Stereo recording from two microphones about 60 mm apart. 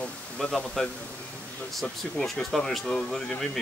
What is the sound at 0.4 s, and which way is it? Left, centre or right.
Speech, centre.